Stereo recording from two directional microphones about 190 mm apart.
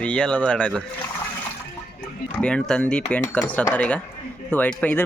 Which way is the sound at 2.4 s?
5° left (ahead or behind).